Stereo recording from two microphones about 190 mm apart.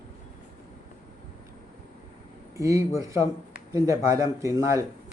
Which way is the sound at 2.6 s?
15° right (ahead or behind).